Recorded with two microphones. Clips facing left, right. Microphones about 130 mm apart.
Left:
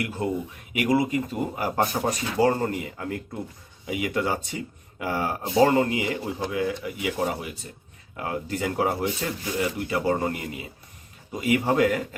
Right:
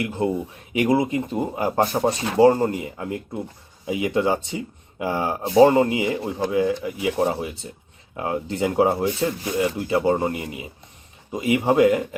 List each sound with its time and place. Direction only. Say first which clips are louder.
0.0 s speech: right 4 dB; 25° right (ahead or behind)